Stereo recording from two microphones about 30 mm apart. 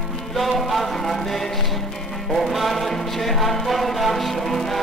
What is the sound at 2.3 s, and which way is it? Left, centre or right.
Music, centre.